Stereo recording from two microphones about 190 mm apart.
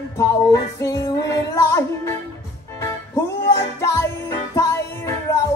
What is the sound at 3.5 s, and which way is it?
Music, 15° left (ahead or behind).